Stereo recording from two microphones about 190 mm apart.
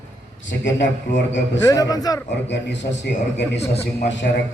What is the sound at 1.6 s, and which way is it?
Speech, 20° left (ahead or behind).